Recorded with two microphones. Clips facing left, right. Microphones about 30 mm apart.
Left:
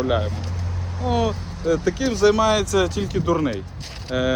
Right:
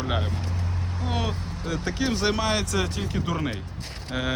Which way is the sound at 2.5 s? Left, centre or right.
Left.